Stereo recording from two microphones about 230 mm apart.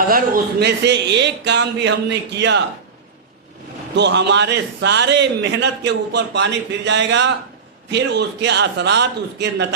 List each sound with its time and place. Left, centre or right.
0.6 s a man's voice: right
3.9 s a man's voice: right